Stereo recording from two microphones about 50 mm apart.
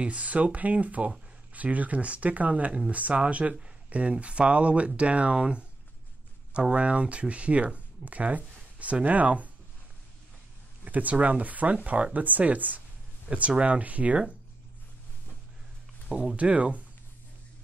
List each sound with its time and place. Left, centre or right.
0.0 s speech: right
3.5 s a sound: right
4.1 s speech: right
10.8 s speech: right
16.1 s speech: centre